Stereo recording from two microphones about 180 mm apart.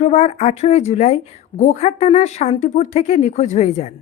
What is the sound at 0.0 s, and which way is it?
Speech, 40° left (ahead or behind).